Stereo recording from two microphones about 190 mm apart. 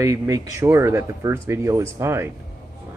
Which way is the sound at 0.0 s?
15° right (ahead or behind).